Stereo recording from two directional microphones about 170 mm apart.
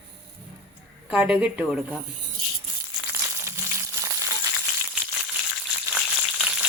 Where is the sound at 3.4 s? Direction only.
15° right (ahead or behind).